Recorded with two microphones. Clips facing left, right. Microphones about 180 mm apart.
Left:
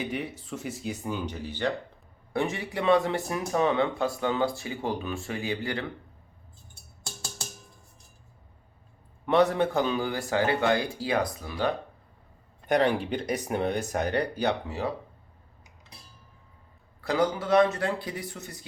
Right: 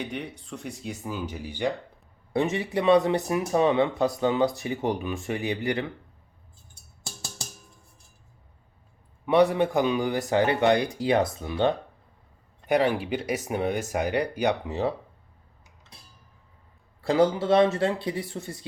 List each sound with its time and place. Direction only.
0.0 s speech: centre (ahead or behind)
2.3 s speech: 25° right (ahead or behind)
9.2 s speech: 10° right (ahead or behind)
12.6 s speech: 5° right (ahead or behind)
17.0 s speech: 25° right (ahead or behind)